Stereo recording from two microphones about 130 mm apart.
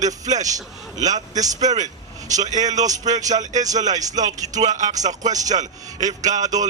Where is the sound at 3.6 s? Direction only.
30° right (ahead or behind).